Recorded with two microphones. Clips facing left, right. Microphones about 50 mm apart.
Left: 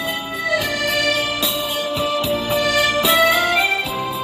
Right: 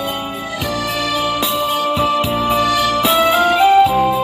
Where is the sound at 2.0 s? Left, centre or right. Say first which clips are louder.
Right 4 dB; right.